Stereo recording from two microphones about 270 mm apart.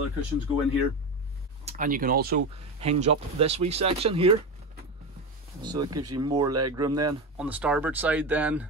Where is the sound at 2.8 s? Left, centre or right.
Right.